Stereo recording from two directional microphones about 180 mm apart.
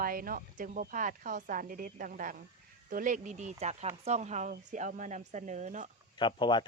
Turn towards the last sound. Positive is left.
turn(degrees=25)  # may be behind; listen again after turning